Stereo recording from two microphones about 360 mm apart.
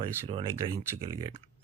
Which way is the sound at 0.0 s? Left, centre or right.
Centre.